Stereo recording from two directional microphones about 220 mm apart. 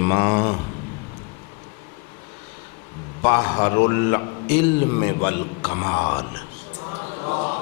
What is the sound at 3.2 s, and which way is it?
Speech, 25° left (ahead or behind).